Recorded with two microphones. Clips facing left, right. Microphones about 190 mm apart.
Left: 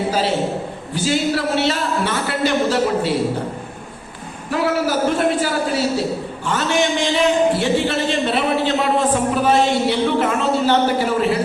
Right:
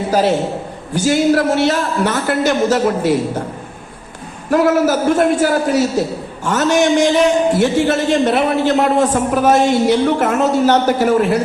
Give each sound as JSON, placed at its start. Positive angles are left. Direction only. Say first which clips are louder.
{"t": 0.9, "sound": "speech", "louder": "right 6 dB", "side_deg": -45}
{"t": 4.5, "sound": "speech", "louder": "right 6 dB", "side_deg": -45}